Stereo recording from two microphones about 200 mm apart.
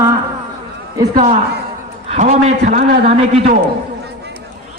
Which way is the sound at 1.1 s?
35° right (ahead or behind).